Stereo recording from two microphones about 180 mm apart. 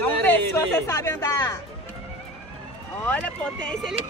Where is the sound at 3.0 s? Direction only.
10° left (ahead or behind).